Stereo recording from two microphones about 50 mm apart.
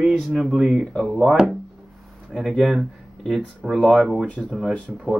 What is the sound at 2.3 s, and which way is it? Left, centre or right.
Speech, centre.